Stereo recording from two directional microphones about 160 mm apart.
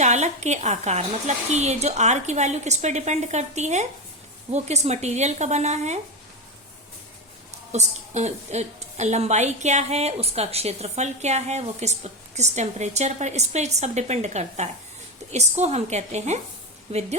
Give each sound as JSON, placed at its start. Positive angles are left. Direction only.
{"t": 0.0, "sound": "a woman's voice", "side_deg": -45}
{"t": 7.7, "sound": "a woman's voice", "side_deg": -45}